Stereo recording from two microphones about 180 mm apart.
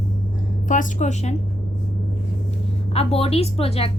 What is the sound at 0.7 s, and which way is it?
Speech, 45° left (ahead or behind).